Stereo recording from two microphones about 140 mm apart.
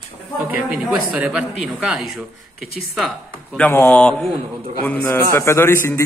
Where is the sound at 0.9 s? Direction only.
10° right (ahead or behind).